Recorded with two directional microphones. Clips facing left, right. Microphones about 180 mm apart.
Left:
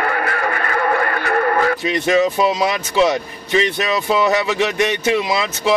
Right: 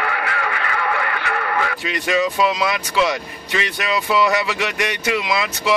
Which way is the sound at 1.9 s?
25° left (ahead or behind).